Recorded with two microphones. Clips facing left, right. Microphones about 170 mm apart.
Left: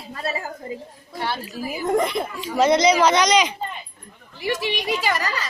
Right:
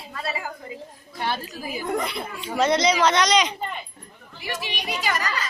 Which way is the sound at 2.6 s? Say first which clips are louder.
Left 4 dB; 10° left (ahead or behind).